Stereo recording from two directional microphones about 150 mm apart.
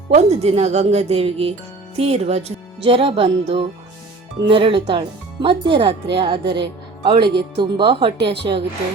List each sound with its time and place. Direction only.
0.1 s speech: 45° right (ahead or behind)
7.3 s speech: 90° right
7.6 s speech: 35° right (ahead or behind)